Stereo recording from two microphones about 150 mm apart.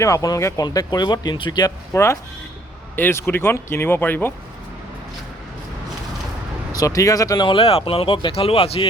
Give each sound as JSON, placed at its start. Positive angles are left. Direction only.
{"t": 0.0, "sound": "speech", "side_deg": 20}
{"t": 6.7, "sound": "speech", "side_deg": 25}
{"t": 7.4, "sound": "speech", "side_deg": 35}